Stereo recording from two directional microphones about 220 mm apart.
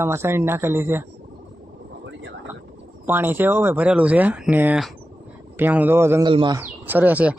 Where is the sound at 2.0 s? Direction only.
55° right (ahead or behind).